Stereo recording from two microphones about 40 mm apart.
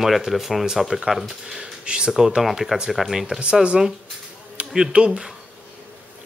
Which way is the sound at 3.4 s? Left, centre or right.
Right.